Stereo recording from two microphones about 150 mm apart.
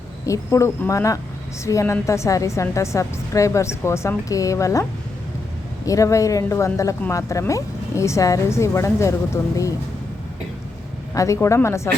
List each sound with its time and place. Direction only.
0.3 s a woman's voice: 20° left (ahead or behind)
11.1 s a woman's voice: 20° left (ahead or behind)